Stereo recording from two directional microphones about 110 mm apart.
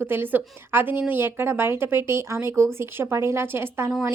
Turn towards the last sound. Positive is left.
turn(degrees=-20)  # may be behind; listen again after turning